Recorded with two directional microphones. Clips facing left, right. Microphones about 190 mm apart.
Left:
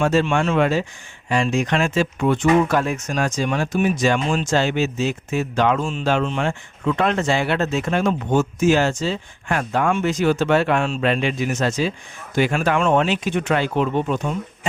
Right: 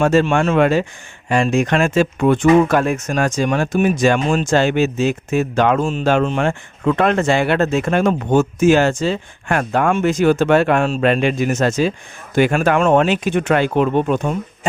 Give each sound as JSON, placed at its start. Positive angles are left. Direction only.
{"t": 0.0, "sound": "speech", "side_deg": -45}